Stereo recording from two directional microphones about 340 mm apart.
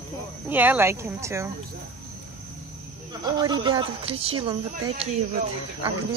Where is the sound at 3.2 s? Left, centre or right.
Centre.